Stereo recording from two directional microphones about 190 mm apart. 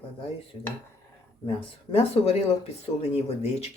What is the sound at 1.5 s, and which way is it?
Speech, 30° left (ahead or behind).